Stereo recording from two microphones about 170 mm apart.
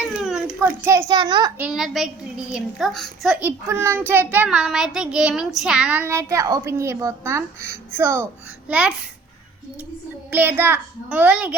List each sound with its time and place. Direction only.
0.2 s a child's voice: 5° right (ahead or behind); by 1.5 s 25° right (ahead or behind)
1.5 s a child's voice: 5° right (ahead or behind)
3.4 s child singing: 15° right (ahead or behind)
10.3 s child singing: 10° right (ahead or behind)